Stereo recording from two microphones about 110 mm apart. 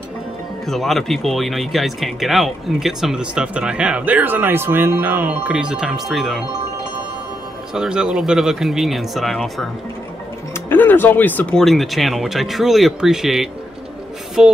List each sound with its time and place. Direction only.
0.7 s speech: centre (ahead or behind)
7.7 s speech: 5° right (ahead or behind)
10.5 s music: 15° left (ahead or behind)
11.5 s speech: centre (ahead or behind)